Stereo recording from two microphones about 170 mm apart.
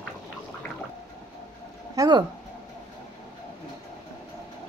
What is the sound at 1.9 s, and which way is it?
Speech, 25° right (ahead or behind).